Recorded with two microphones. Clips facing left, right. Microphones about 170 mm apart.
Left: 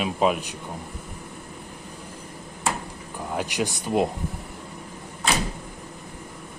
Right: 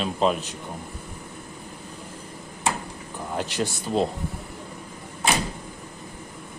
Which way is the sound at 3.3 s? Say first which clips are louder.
Even; 15° left (ahead or behind).